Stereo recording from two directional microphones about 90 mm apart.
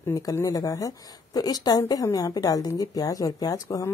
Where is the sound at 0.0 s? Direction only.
40° left (ahead or behind).